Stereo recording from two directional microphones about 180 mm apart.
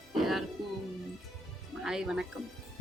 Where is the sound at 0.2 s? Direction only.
Centre (ahead or behind).